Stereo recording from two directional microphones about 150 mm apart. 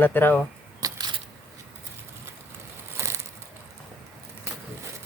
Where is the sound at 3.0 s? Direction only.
20° right (ahead or behind).